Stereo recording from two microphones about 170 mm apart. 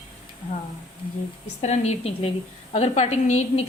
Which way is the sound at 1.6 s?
40° left (ahead or behind).